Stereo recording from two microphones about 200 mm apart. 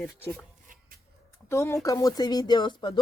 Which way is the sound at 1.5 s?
15° left (ahead or behind).